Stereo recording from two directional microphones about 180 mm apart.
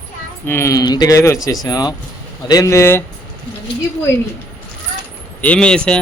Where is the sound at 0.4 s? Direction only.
15° left (ahead or behind).